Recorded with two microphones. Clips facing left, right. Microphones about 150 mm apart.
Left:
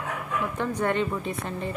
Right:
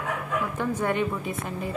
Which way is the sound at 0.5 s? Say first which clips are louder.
Left 1 dB; 5° right (ahead or behind).